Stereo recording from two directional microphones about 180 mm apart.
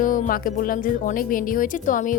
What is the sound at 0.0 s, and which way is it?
A woman's voice, 50° left (ahead or behind).